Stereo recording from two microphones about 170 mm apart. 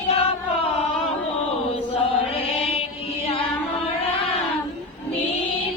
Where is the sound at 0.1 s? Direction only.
35° left (ahead or behind).